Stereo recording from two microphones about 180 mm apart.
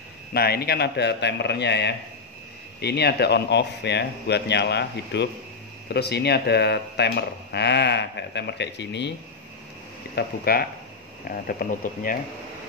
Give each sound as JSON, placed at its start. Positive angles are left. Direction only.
{"t": 0.3, "sound": "speech", "side_deg": 60}
{"t": 10.1, "sound": "speech", "side_deg": 55}